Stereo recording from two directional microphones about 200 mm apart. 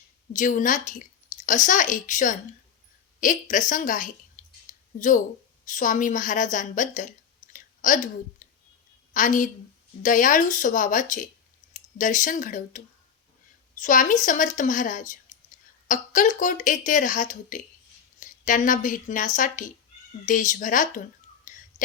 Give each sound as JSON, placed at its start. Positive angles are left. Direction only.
{"t": 0.3, "sound": "speech", "side_deg": 40}
{"t": 4.4, "sound": "a sound", "side_deg": 40}
{"t": 4.9, "sound": "speech", "side_deg": 40}
{"t": 7.5, "sound": "chewing", "side_deg": 40}
{"t": 9.1, "sound": "speech", "side_deg": 40}
{"t": 21.5, "sound": "whispering", "side_deg": 40}